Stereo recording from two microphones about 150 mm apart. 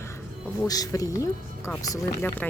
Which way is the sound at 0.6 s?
25° left (ahead or behind).